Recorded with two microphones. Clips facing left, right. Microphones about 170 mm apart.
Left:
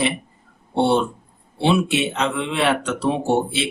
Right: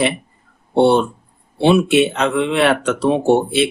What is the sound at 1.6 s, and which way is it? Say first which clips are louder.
Speech: right 6 dB; 60° right (ahead or behind).